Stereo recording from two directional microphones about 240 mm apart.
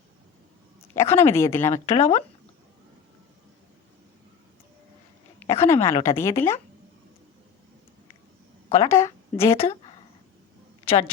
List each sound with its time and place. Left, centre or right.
0.9 s a woman's voice: centre
1.9 s speech: left
5.4 s a woman's voice: centre
8.7 s a woman's voice: centre
9.6 s a woman's voice: left